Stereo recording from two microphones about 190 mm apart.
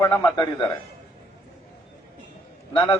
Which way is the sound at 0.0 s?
20° left (ahead or behind).